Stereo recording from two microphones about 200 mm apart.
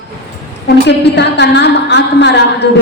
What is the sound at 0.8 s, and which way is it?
A woman's voice, 60° left (ahead or behind).